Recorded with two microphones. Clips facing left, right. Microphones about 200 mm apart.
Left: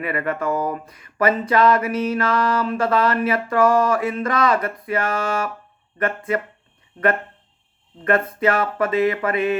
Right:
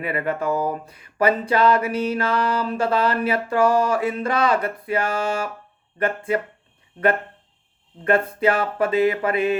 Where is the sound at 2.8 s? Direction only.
30° right (ahead or behind).